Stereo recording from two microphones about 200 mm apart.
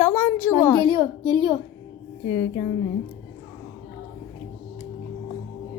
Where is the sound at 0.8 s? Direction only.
20° right (ahead or behind).